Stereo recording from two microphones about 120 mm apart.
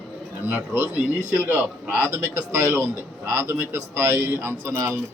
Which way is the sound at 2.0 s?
25° right (ahead or behind).